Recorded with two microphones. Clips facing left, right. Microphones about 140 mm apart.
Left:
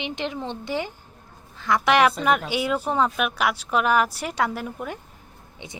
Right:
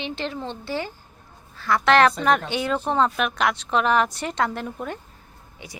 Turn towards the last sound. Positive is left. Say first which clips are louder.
# left 1 dB
turn(degrees=20)  # may be behind; listen again after turning